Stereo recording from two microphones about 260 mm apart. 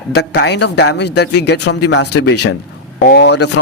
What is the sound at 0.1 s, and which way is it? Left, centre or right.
Speech, left.